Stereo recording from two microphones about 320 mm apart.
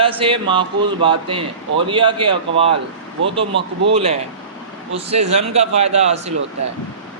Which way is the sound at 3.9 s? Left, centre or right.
Centre.